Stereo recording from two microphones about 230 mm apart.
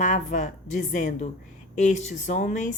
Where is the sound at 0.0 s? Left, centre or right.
Left.